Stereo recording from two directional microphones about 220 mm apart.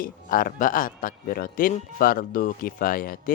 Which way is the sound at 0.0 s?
40° left (ahead or behind).